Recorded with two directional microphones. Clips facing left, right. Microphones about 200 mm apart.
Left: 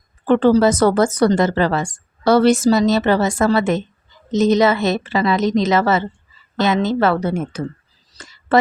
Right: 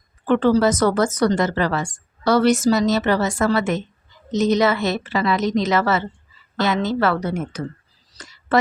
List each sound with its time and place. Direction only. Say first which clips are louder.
0.3 s speech: left 3 dB; 30° left (ahead or behind)